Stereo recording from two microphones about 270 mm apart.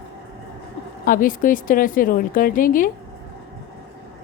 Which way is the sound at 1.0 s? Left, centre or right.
Left.